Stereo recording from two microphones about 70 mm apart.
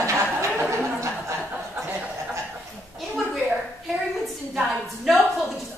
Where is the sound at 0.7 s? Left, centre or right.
Right.